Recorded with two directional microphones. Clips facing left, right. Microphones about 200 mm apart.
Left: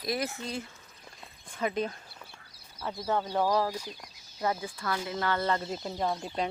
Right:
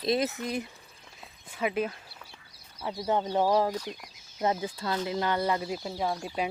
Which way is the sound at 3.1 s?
20° right (ahead or behind).